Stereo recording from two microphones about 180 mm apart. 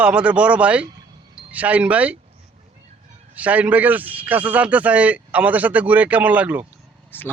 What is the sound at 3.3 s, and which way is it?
A man's voice, 10° right (ahead or behind).